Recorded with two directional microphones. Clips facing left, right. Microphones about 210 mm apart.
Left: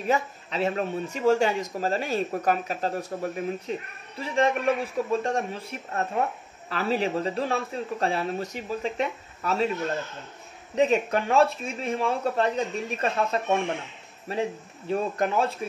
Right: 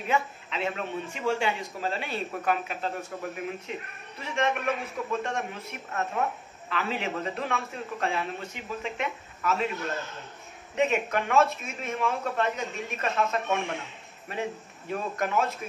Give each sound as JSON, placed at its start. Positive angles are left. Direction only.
{"t": 0.1, "sound": "speech", "side_deg": 40}
{"t": 10.7, "sound": "speech", "side_deg": 35}